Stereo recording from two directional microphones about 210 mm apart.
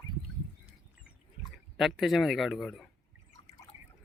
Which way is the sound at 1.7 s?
Centre (ahead or behind).